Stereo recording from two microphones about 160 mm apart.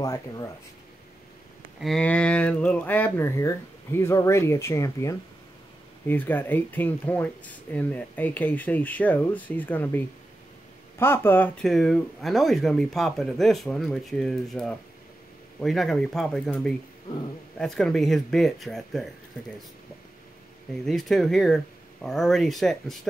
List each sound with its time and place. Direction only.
0.0 s speech: 20° left (ahead or behind)
1.8 s speech: 5° left (ahead or behind)
17.6 s speech: 5° left (ahead or behind)
20.8 s speech: centre (ahead or behind)